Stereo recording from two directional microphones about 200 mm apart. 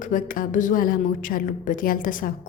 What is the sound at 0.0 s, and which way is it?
A woman's voice, 40° left (ahead or behind).